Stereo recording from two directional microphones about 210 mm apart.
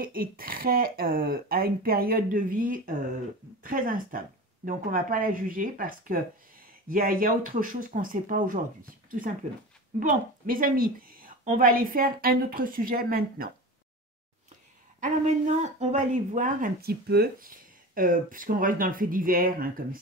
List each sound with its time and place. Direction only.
0.0 s a woman's voice: 45° right (ahead or behind)
15.0 s speech: 35° right (ahead or behind)